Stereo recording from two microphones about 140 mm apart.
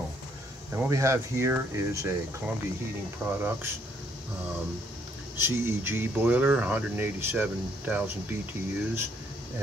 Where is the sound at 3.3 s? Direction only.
15° right (ahead or behind).